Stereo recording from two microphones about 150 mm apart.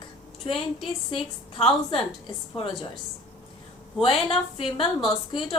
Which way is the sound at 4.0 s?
40° left (ahead or behind).